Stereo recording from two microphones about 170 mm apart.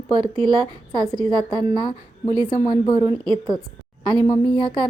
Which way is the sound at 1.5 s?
25° left (ahead or behind).